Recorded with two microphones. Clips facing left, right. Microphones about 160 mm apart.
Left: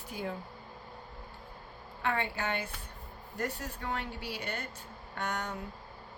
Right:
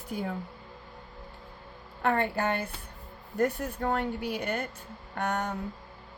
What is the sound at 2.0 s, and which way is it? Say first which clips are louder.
A woman's voice: right 6 dB; 50° right (ahead or behind).